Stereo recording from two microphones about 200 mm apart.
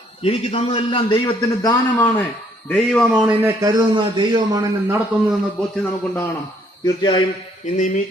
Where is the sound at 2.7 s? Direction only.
5° left (ahead or behind).